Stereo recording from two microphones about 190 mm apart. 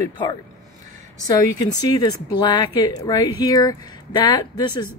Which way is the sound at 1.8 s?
20° left (ahead or behind).